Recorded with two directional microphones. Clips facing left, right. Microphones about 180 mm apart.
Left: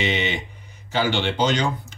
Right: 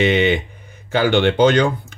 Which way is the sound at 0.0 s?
55° right (ahead or behind).